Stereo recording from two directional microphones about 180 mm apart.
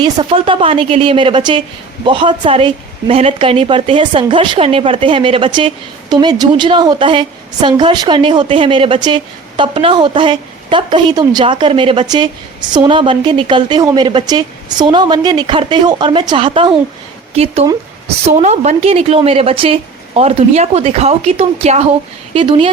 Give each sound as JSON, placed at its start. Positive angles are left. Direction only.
{"t": 0.0, "sound": "a woman's voice", "side_deg": -25}